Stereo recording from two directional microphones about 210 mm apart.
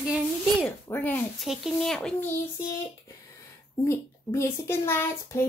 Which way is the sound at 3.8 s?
10° left (ahead or behind).